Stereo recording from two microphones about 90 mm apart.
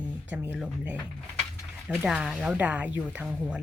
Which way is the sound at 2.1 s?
10° right (ahead or behind).